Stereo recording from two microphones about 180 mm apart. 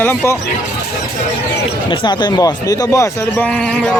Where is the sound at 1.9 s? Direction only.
25° left (ahead or behind).